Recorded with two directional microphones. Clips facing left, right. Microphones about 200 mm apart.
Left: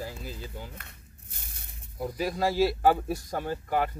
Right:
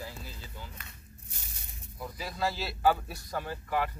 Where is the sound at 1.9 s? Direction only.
35° left (ahead or behind).